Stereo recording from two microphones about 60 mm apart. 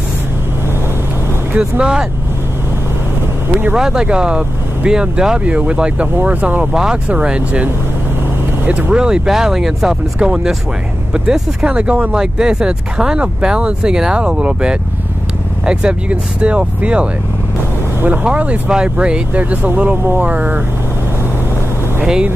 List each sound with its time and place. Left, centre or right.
1.6 s speech: centre
3.7 s speech: centre
6.7 s speech: centre
7.1 s speech: centre
8.9 s speech: centre; by 20.6 s right